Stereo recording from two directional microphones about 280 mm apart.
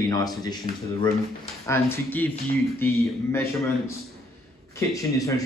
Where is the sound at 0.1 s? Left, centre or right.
Centre.